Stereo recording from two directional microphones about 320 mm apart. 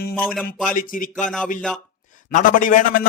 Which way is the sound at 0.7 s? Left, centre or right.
Left.